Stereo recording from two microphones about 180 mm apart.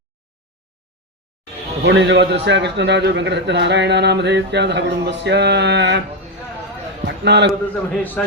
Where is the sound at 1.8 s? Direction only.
80° right.